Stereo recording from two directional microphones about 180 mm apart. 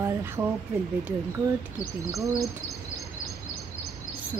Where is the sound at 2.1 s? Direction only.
15° right (ahead or behind).